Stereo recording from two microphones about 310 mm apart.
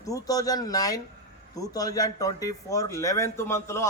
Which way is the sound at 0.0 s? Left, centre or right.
Centre.